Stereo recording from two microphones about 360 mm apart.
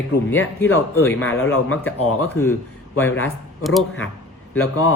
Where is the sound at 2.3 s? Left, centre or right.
Centre.